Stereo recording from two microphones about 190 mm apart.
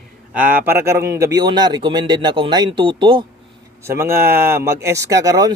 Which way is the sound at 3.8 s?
15° right (ahead or behind).